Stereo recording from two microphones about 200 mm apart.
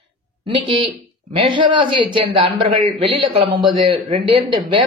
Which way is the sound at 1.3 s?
25° right (ahead or behind).